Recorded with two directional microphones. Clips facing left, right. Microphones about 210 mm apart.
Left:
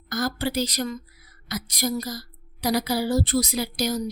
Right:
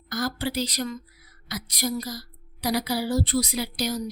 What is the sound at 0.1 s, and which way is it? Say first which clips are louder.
A woman's voice: left 2 dB; 45° left (ahead or behind).